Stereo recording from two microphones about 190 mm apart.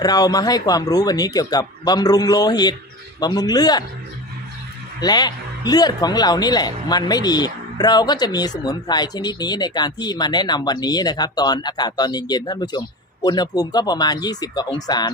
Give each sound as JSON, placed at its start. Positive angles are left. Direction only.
{"t": 0.0, "sound": "speech", "side_deg": 20}
{"t": 4.9, "sound": "speech", "side_deg": 20}